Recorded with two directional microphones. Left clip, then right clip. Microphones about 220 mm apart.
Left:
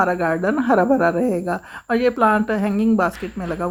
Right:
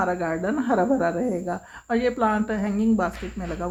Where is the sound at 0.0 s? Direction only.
30° left (ahead or behind).